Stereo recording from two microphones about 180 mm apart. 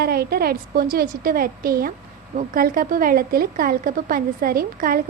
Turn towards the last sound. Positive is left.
turn(degrees=-55)  # may be behind; listen again after turning